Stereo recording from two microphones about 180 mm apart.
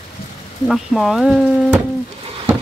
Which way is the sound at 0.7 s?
Centre (ahead or behind).